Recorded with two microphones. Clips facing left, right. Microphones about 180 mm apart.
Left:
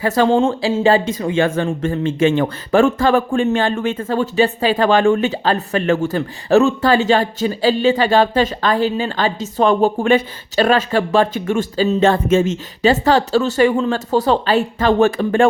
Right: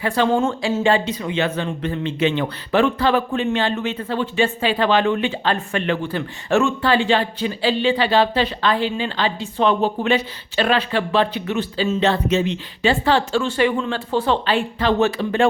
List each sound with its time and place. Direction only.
0.0 s speech: 40° left (ahead or behind)
0.3 s speech: 30° left (ahead or behind); by 15.4 s 50° left (ahead or behind)